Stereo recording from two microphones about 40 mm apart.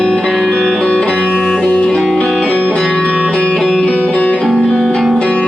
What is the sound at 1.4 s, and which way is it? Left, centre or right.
Music, centre.